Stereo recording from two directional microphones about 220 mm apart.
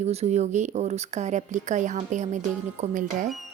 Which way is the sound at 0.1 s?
30° right (ahead or behind).